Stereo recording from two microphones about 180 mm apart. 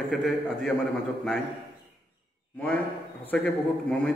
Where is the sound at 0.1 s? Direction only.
5° left (ahead or behind).